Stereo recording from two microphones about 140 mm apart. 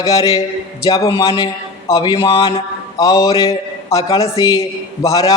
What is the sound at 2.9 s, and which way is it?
A man's voice, 25° left (ahead or behind).